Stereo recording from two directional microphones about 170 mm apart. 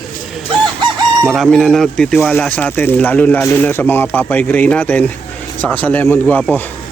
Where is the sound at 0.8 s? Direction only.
25° right (ahead or behind).